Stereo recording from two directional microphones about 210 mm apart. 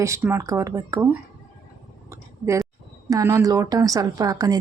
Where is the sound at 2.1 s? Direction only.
15° right (ahead or behind).